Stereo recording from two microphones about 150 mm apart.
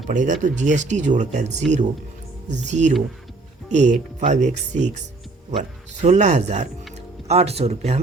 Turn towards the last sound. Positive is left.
turn(degrees=-45)  # may be behind; listen again after turning